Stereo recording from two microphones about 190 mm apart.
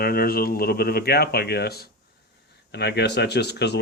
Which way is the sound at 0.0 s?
50° left (ahead or behind).